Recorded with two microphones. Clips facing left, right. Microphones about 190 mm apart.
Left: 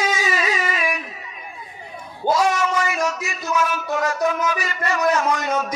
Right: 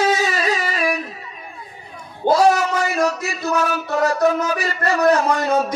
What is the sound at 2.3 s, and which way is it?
Speech, 35° right (ahead or behind).